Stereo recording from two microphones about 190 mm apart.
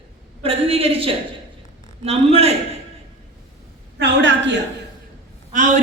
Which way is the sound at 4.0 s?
70° right (ahead or behind).